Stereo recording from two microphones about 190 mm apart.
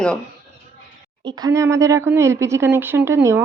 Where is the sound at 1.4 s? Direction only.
15° right (ahead or behind).